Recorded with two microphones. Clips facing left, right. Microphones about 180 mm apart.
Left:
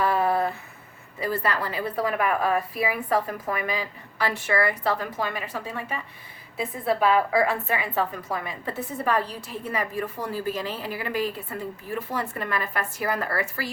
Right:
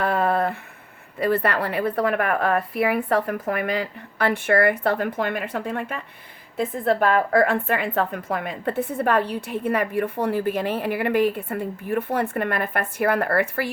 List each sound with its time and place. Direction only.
0.0 s a sound: 60° right (ahead or behind)
1.2 s a woman's voice: 60° right (ahead or behind)
7.0 s a woman's voice: 55° right (ahead or behind)